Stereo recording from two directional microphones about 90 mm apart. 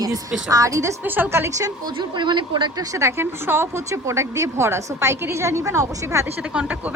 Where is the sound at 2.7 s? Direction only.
40° right (ahead or behind).